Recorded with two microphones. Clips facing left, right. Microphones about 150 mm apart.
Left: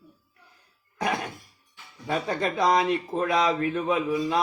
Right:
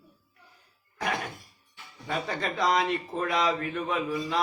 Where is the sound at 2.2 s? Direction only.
20° left (ahead or behind).